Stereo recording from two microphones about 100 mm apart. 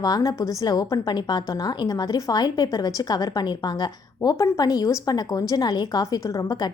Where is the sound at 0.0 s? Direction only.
40° left (ahead or behind).